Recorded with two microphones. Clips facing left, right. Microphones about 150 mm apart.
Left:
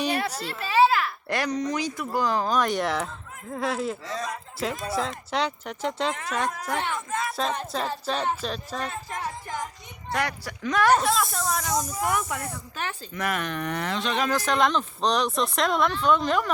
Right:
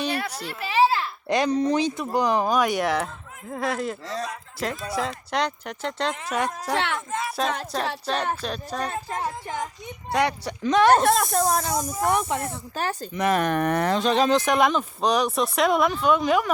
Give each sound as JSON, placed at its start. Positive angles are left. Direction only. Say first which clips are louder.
{"t": 0.0, "sound": "a sound", "louder": "left 1 dB", "side_deg": 10}
{"t": 0.3, "sound": "speech", "louder": "even", "side_deg": -10}
{"t": 4.0, "sound": "speech", "louder": "right 2 dB", "side_deg": -35}
{"t": 4.3, "sound": "speech", "louder": "even", "side_deg": 0}
{"t": 6.1, "sound": "speech", "louder": "right 2 dB", "side_deg": -15}
{"t": 6.7, "sound": "speech", "louder": "right 5 dB", "side_deg": -75}
{"t": 7.1, "sound": "speech", "louder": "even", "side_deg": -20}
{"t": 7.6, "sound": "speech", "louder": "right 1 dB", "side_deg": 0}
{"t": 8.8, "sound": "speech", "louder": "right 4 dB", "side_deg": -35}
{"t": 10.9, "sound": "speech", "louder": "right 4 dB", "side_deg": -55}
{"t": 11.4, "sound": "speech", "louder": "right 5 dB", "side_deg": -35}
{"t": 11.7, "sound": "speech", "louder": "right 1 dB", "side_deg": -10}
{"t": 12.0, "sound": "speech", "louder": "right 4 dB", "side_deg": -30}
{"t": 14.3, "sound": "speech", "louder": "right 3 dB", "side_deg": -20}